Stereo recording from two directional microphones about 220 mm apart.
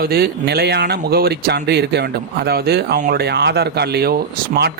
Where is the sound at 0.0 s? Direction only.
45° right (ahead or behind).